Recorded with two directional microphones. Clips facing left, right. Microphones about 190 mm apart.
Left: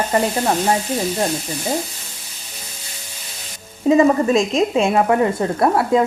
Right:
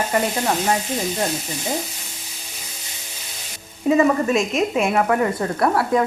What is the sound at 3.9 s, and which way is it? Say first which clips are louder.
A woman's voice: left 3 dB; 30° left (ahead or behind).